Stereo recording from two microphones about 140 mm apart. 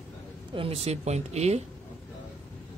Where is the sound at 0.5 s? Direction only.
40° right (ahead or behind).